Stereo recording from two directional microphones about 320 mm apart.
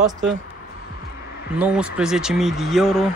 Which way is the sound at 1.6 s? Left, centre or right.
Centre.